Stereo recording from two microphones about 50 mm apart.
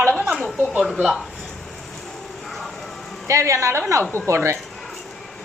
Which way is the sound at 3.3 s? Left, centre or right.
Right.